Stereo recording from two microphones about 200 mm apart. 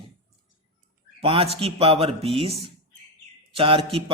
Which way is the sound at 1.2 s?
30° right (ahead or behind).